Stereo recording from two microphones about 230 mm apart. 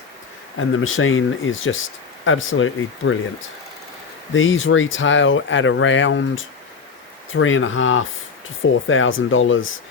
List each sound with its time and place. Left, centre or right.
0.5 s speech: left
4.4 s speech: left